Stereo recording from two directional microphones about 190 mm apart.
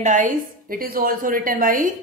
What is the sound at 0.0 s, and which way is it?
A woman's voice, 40° right (ahead or behind).